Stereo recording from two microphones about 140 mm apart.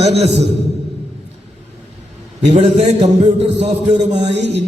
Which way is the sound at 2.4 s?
55° right (ahead or behind).